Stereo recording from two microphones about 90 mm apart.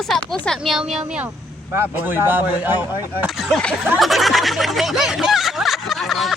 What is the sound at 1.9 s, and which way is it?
Speech, 20° right (ahead or behind).